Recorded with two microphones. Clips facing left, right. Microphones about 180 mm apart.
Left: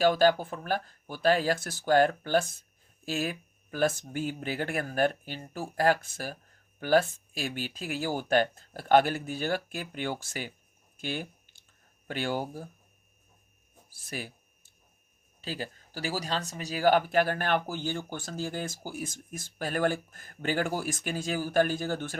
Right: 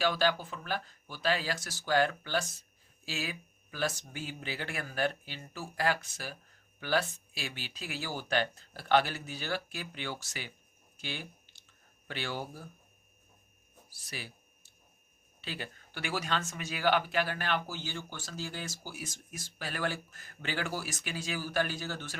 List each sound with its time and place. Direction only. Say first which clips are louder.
0.0 s speech: left 7 dB; 45° left (ahead or behind)
11.0 s a sound: left 7 dB; 50° left (ahead or behind)
12.0 s speech: left 6 dB; 45° left (ahead or behind)
14.0 s speech: left 6 dB; 50° left (ahead or behind)
15.4 s speech: left 5 dB; 40° left (ahead or behind)